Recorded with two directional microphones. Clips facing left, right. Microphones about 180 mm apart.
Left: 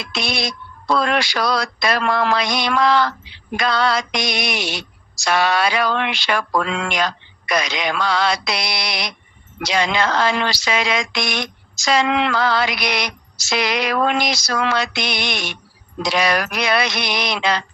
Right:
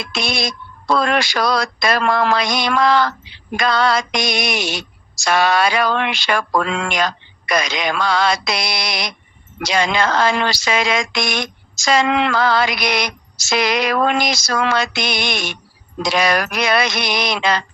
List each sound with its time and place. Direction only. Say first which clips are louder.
0.0 s speech: right 2 dB; 45° right (ahead or behind)